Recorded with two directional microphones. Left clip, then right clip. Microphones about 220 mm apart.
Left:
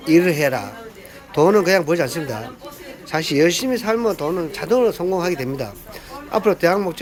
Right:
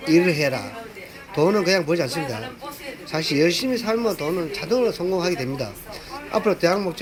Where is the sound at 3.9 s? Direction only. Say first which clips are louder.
Left 4 dB; 5° left (ahead or behind).